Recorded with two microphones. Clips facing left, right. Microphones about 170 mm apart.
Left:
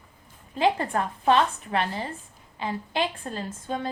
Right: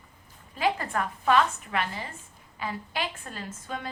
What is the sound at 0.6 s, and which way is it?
A woman's voice, 30° left (ahead or behind).